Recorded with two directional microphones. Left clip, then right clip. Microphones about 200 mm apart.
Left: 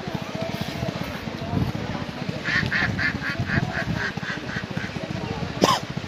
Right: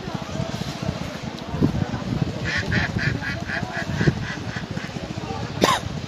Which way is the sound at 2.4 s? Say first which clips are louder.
Left 2 dB; 60° right (ahead or behind).